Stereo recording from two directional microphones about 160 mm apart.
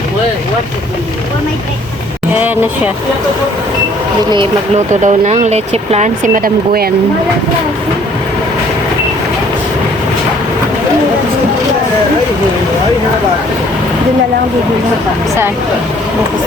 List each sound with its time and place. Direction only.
5.0 s speech: 45° right (ahead or behind); by 6.9 s 65° right (ahead or behind)